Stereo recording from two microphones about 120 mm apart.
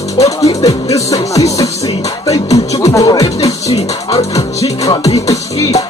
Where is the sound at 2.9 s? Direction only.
30° left (ahead or behind).